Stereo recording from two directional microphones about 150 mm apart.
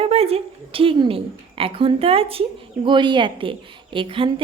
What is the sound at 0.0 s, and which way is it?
A woman's voice, 40° right (ahead or behind).